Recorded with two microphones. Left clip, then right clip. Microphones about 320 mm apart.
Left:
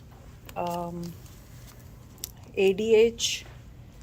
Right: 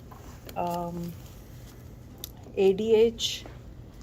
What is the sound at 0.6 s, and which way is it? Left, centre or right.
Speech, centre.